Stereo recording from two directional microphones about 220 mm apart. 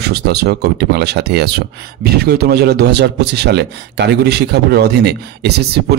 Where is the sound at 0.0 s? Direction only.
45° right (ahead or behind).